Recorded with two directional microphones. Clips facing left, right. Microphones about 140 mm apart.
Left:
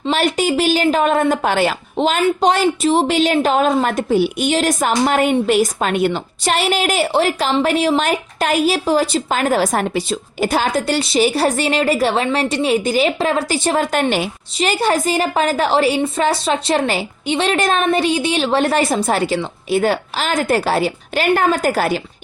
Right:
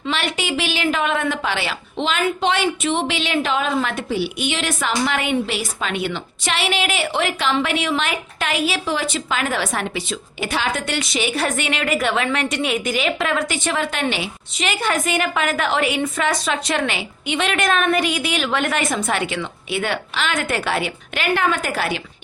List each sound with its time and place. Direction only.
0.1 s a woman's voice: 40° left (ahead or behind)